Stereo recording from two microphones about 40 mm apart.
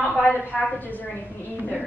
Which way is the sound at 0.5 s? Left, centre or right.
Centre.